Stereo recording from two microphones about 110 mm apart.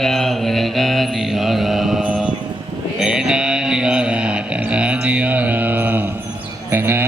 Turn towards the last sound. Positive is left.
turn(degrees=-20)  # may be behind; listen again after turning